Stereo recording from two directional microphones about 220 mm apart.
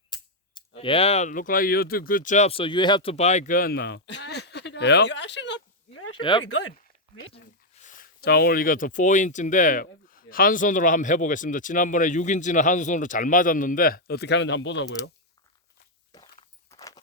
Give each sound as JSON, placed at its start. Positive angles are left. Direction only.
{"t": 0.1, "sound": "a sound", "side_deg": 20}
{"t": 0.8, "sound": "speech", "side_deg": 25}
{"t": 6.1, "sound": "speech", "side_deg": 20}
{"t": 6.4, "sound": "speech", "side_deg": 60}
{"t": 7.8, "sound": "speech", "side_deg": 35}
{"t": 16.7, "sound": "horse", "side_deg": 15}